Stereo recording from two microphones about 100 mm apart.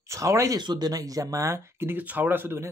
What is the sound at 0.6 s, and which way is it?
Speech, 45° right (ahead or behind).